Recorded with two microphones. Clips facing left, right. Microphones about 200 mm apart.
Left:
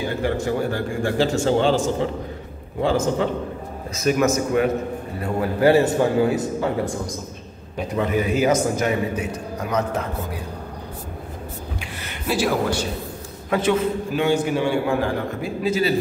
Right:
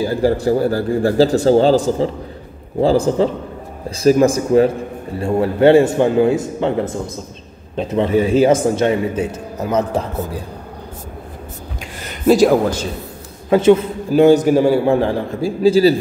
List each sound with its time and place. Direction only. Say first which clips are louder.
0.0 s a man's voice: right 7 dB; 35° right (ahead or behind)
7.7 s a man's voice: right 6 dB; 25° right (ahead or behind)
11.8 s a sound: right 12 dB; 45° right (ahead or behind)
13.5 s a man's voice: right 8 dB; 30° right (ahead or behind)
14.2 s a man's voice: right 10 dB; 40° right (ahead or behind)